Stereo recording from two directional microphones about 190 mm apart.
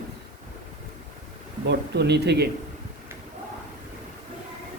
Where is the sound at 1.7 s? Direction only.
60° right (ahead or behind).